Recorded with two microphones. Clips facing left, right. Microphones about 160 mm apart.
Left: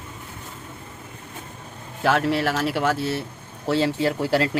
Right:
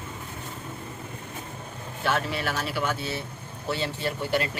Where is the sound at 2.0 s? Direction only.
85° left.